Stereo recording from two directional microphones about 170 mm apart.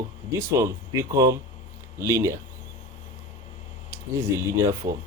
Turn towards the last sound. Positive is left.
turn(degrees=-15)  # may be behind; listen again after turning